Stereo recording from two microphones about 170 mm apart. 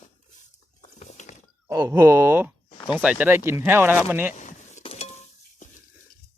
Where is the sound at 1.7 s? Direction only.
20° right (ahead or behind).